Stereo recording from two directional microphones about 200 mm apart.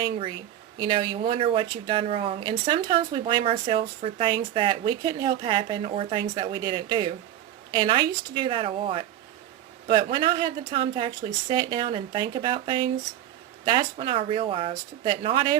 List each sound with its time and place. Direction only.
0.0 s speech: 25° right (ahead or behind)